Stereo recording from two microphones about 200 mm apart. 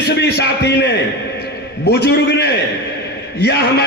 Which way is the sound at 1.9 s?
55° left (ahead or behind).